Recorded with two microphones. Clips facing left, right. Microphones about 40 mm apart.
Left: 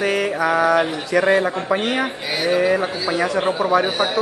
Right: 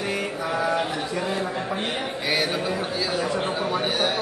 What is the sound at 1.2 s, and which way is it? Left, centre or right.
Speech, left.